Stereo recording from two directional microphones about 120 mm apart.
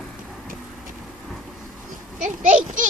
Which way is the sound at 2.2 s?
90° right.